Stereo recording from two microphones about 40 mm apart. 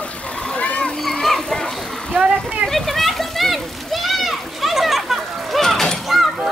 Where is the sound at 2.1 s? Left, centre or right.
Right.